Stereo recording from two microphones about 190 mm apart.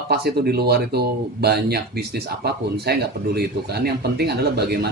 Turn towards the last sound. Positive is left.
turn(degrees=-55)  # may be behind; listen again after turning